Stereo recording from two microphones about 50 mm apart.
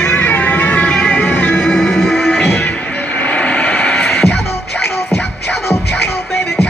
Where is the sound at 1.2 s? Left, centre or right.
Left.